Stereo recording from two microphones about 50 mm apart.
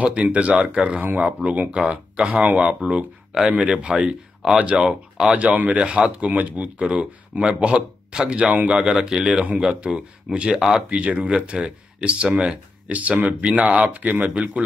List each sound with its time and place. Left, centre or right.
0.0 s speech: right
5.5 s speech: right
5.8 s speech: centre
10.5 s speech: centre
10.9 s speech: right